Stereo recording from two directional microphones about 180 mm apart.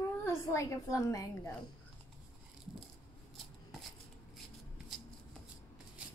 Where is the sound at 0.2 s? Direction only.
15° left (ahead or behind).